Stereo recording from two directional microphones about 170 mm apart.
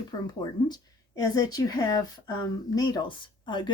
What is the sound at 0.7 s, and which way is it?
Speech, 20° left (ahead or behind).